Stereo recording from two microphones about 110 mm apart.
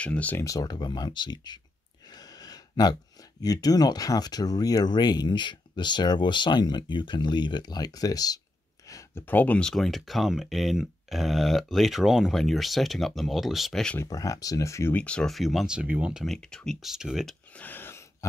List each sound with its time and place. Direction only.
0.0 s speech: 15° left (ahead or behind)
0.4 s speech: 30° left (ahead or behind)
8.8 s a sound: 30° left (ahead or behind)
9.2 s speech: 15° left (ahead or behind)
14.0 s speech: 30° left (ahead or behind)
15.0 s speech: 10° left (ahead or behind)
16.3 s speech: 5° left (ahead or behind)
17.5 s a sound: 15° left (ahead or behind)